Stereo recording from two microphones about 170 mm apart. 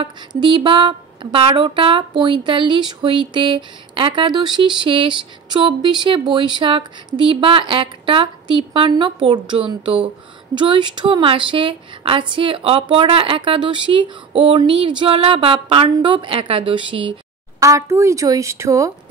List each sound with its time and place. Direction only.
0.0 s speech: 30° right (ahead or behind)
17.6 s speech: 20° right (ahead or behind)